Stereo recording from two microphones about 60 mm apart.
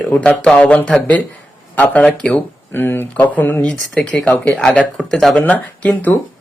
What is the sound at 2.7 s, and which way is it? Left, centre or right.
Speech, left.